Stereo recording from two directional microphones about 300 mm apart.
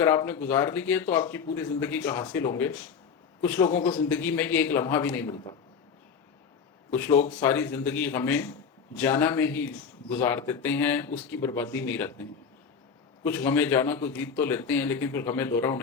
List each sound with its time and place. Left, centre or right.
0.0 s speech: centre
6.9 s speech: centre
13.2 s speech: centre